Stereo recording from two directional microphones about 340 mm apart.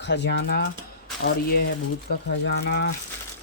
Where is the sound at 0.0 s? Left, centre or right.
Left.